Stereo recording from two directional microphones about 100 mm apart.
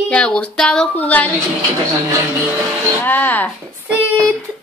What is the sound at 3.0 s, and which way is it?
Speech, 20° left (ahead or behind).